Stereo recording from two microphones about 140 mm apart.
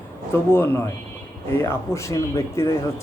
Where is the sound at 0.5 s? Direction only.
15° left (ahead or behind).